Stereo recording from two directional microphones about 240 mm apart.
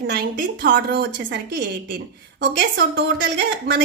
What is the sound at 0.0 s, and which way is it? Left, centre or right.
A woman's voice, right.